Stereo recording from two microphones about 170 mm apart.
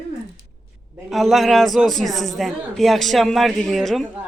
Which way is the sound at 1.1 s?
Centre (ahead or behind).